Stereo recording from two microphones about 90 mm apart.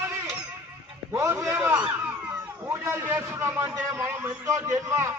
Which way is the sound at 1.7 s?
15° right (ahead or behind).